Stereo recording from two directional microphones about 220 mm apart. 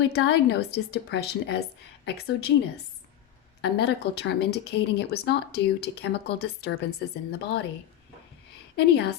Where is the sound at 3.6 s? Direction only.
50° left (ahead or behind).